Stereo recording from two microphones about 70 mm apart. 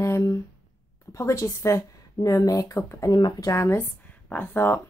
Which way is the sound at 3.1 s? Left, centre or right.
Left.